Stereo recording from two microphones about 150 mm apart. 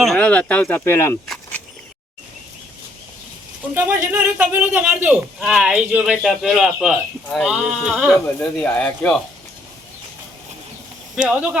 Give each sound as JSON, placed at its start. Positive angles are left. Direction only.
{"t": 0.0, "sound": "speech", "side_deg": 5}
{"t": 3.8, "sound": "speech", "side_deg": -15}